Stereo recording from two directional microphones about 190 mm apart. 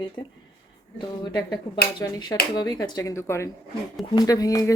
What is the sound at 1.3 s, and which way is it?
Speech, 20° left (ahead or behind).